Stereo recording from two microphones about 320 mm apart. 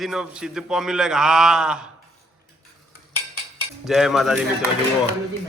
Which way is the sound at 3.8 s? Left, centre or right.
Centre.